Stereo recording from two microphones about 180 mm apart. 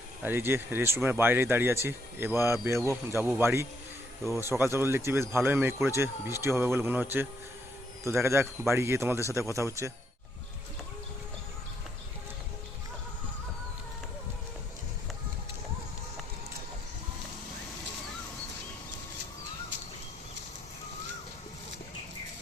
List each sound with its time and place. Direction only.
0.2 s speech: 10° right (ahead or behind)